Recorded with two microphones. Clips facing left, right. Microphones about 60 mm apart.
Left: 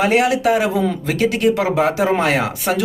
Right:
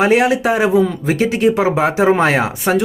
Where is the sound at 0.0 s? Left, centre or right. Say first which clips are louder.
Right 2 dB; right.